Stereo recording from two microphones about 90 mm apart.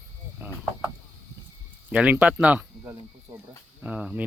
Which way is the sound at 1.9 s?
15° right (ahead or behind).